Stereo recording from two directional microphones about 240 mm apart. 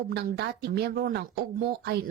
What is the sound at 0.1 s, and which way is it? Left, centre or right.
A woman's voice, right.